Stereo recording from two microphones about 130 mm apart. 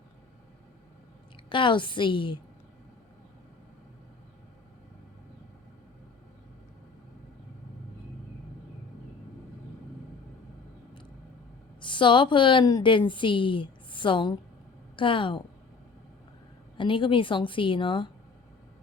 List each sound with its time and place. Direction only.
1.5 s a woman's voice: 40° left (ahead or behind)
11.8 s a woman's voice: 40° left (ahead or behind)
16.7 s a woman's voice: 40° left (ahead or behind)